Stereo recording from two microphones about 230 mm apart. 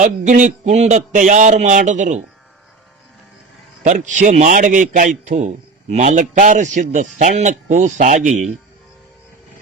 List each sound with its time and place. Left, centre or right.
0.0 s speech: right
3.8 s speech: right